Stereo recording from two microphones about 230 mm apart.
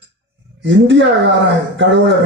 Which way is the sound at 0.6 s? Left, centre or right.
Right.